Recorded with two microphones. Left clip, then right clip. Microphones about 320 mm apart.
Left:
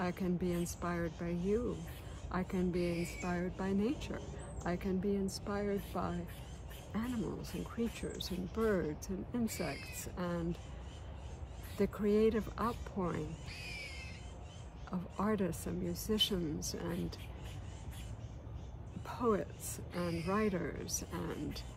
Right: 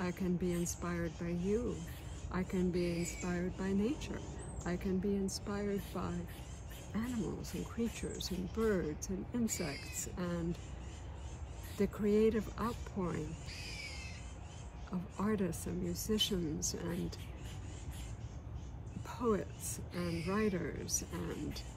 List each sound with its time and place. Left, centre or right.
0.0 s speech: centre
11.8 s speech: centre
14.9 s speech: centre
19.0 s speech: centre